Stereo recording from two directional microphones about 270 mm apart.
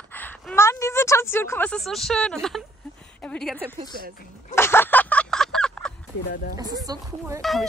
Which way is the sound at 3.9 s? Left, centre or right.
Right.